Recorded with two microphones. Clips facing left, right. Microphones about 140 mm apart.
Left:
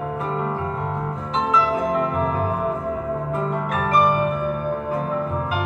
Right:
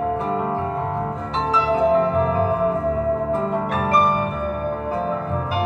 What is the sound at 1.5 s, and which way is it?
Music, 35° right (ahead or behind).